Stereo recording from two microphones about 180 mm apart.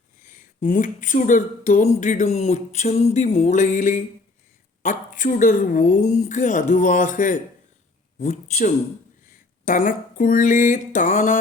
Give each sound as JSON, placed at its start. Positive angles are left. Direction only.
{"t": 0.3, "sound": "a sound", "side_deg": 45}
{"t": 8.2, "sound": "speech", "side_deg": 40}
{"t": 9.2, "sound": "speech", "side_deg": 50}